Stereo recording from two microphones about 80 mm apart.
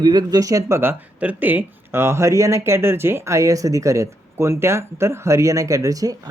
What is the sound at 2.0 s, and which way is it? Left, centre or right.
Speech, right.